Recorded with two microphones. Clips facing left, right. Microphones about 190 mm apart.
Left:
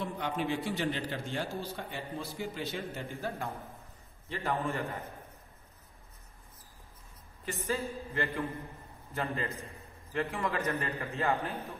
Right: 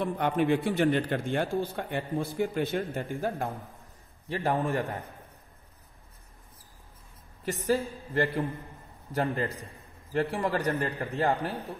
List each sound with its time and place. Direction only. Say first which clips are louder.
0.0 s a man's voice: right 7 dB; 55° right (ahead or behind)
4.4 s a man's voice: right 5 dB; 35° right (ahead or behind)
7.6 s a man's voice: right 6 dB; 35° right (ahead or behind)
9.2 s a man's voice: right 6 dB; 55° right (ahead or behind)
10.1 s a man's voice: right 5 dB; 35° right (ahead or behind)